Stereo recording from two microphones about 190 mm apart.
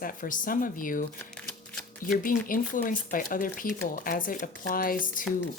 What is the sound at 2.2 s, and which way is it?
Speech, 45° left (ahead or behind).